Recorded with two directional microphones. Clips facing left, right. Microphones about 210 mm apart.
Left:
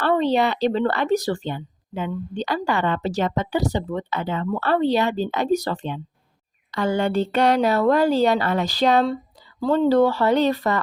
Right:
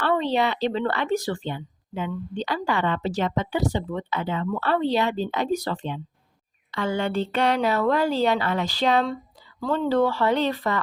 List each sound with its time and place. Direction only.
0.0 s a woman's voice: 40° left (ahead or behind)